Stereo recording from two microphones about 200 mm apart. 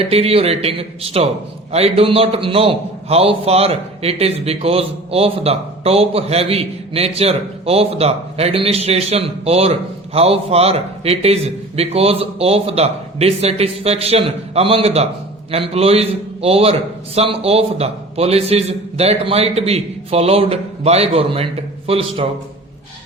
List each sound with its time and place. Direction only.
0.0 s a man's voice: 30° right (ahead or behind)